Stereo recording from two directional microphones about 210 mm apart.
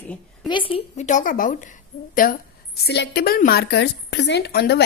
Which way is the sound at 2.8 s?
55° left (ahead or behind).